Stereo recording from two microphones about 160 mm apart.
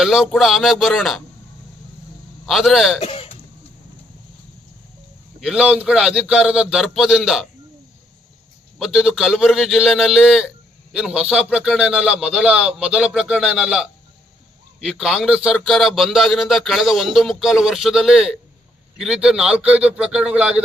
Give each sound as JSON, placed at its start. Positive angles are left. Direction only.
{"t": 0.0, "sound": "speech", "side_deg": 0}
{"t": 2.5, "sound": "speech", "side_deg": 0}
{"t": 3.0, "sound": "throat clearing", "side_deg": 40}
{"t": 5.4, "sound": "speech", "side_deg": -5}
{"t": 8.8, "sound": "a man's voice", "side_deg": -5}